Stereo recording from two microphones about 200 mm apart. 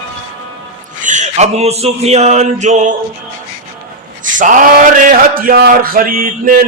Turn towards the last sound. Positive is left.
turn(degrees=-45)  # may be behind; listen again after turning